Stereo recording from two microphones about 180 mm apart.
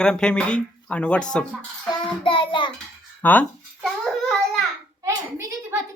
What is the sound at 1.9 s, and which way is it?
Child singing, 25° left (ahead or behind).